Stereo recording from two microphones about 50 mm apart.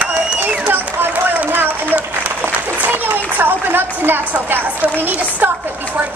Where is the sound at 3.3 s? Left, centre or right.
Right.